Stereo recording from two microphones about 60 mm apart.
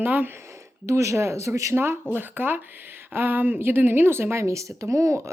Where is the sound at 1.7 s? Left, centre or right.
Right.